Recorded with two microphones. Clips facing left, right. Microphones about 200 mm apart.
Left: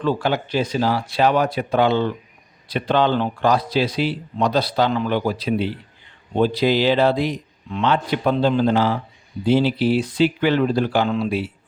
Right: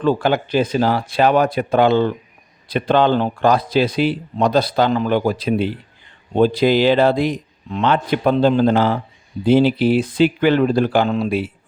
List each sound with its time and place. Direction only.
0.0 s a man's voice: 55° right (ahead or behind)